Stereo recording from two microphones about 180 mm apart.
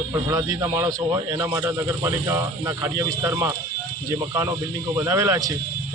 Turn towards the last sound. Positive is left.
turn(degrees=-15)  # may be behind; listen again after turning